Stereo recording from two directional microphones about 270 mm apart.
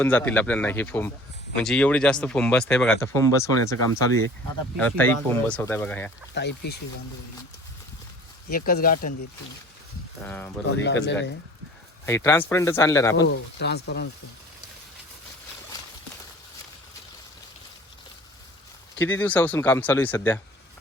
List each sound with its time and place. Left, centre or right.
0.0 s speech: centre
4.8 s speech: centre
6.4 s speech: left
8.4 s speech: left
10.2 s speech: centre
10.8 s speech: left
12.0 s speech: centre
13.1 s speech: left
18.9 s speech: centre